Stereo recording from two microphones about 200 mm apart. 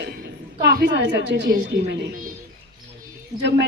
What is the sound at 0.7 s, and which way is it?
A woman's voice, 60° right (ahead or behind).